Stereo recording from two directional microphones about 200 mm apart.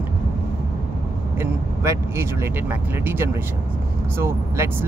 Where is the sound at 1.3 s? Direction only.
15° right (ahead or behind).